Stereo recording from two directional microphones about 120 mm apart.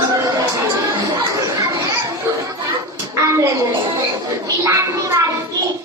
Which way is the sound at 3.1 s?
25° right (ahead or behind).